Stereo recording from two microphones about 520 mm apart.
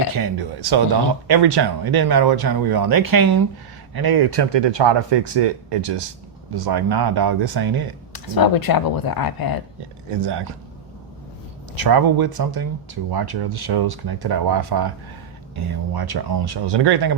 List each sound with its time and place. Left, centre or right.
0.1 s speech: right
8.1 s speech: left
10.2 s speech: right
11.7 s speech: right